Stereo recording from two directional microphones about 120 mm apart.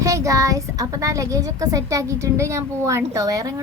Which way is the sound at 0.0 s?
25° right (ahead or behind).